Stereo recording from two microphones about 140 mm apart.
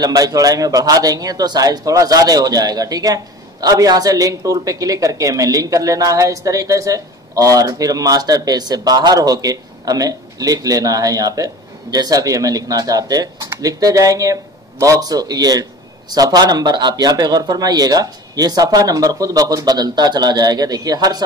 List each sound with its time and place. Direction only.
0.0 s speech: 25° right (ahead or behind)